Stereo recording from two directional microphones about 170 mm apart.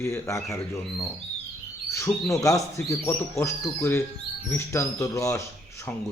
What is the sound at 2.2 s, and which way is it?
A man's voice, 20° left (ahead or behind).